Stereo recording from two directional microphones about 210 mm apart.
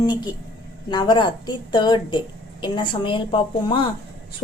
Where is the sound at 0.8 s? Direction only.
20° left (ahead or behind).